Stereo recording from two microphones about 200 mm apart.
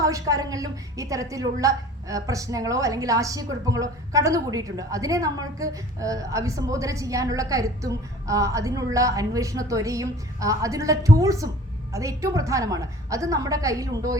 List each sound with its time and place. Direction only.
0.0 s a woman's voice: 15° right (ahead or behind)